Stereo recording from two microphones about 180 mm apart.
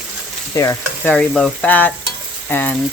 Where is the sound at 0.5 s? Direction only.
15° left (ahead or behind).